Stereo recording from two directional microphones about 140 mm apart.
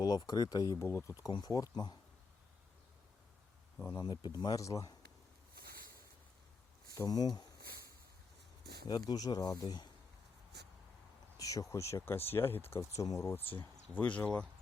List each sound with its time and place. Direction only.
0.0 s speech: 30° left (ahead or behind)
3.9 s speech: 30° left (ahead or behind)
5.5 s a sound: 90° right
6.8 s speech: 25° left (ahead or behind)
8.9 s speech: 30° left (ahead or behind)
11.3 s a sound: 25° left (ahead or behind)
11.7 s speech: 20° left (ahead or behind)